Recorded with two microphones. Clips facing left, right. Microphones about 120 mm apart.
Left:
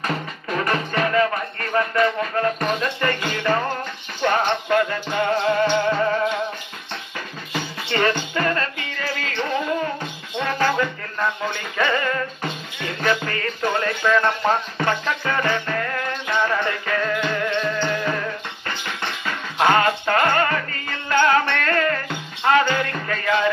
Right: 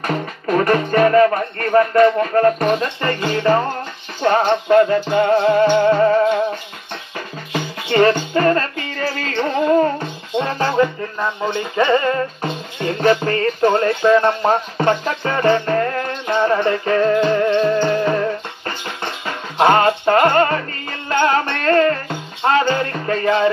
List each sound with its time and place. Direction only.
0.0 s speech: 45° right (ahead or behind)
4.2 s music: 35° right (ahead or behind)
7.9 s music: 40° right (ahead or behind)
10.3 s music: 30° right (ahead or behind)